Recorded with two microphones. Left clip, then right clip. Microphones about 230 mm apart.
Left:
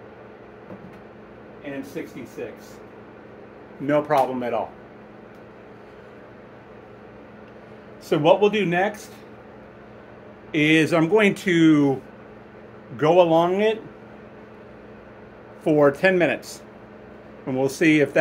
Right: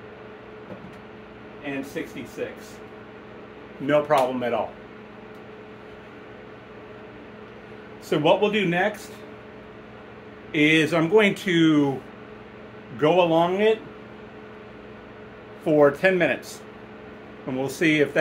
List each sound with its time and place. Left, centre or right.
3.8 s speech: centre
8.1 s speech: left
10.5 s speech: left
12.9 s speech: left
15.6 s speech: left